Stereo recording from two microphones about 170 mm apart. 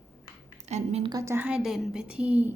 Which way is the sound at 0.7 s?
35° right (ahead or behind).